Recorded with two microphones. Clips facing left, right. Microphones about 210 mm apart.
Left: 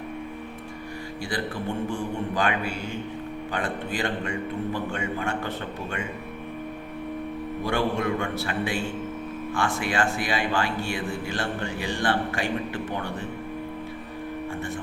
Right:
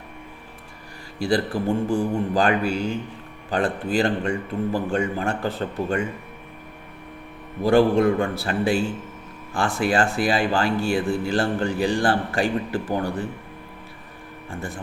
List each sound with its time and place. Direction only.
1.2 s speech: 35° right (ahead or behind)
7.6 s speech: 35° right (ahead or behind)